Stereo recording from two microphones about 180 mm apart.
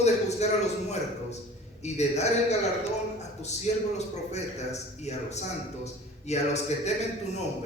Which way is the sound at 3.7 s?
40° left (ahead or behind).